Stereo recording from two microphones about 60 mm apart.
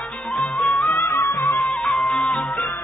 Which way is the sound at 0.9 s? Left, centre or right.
Left.